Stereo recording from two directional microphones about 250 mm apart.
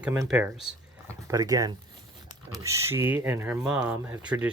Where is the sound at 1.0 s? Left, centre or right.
Centre.